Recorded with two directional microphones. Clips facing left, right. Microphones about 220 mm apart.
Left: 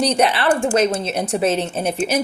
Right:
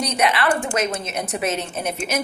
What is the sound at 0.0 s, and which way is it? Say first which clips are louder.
A woman's voice: left 4 dB; 30° left (ahead or behind).